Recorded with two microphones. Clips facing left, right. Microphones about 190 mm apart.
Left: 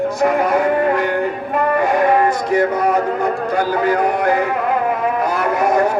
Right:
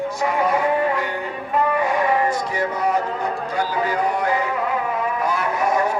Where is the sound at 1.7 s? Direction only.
45° left (ahead or behind).